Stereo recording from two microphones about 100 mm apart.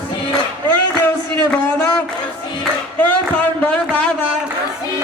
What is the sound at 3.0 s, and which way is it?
Speech, 15° left (ahead or behind).